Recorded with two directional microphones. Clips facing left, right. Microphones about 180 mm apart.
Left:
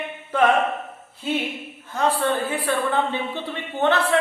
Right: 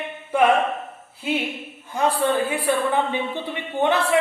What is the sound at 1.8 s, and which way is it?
A woman's voice, 15° right (ahead or behind).